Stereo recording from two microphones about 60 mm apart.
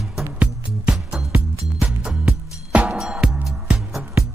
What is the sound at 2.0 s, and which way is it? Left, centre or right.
Music, centre.